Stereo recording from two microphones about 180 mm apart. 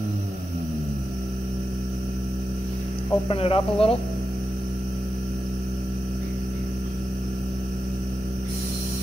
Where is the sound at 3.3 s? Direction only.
30° left (ahead or behind).